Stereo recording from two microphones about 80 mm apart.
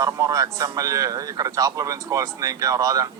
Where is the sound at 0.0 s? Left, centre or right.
Right.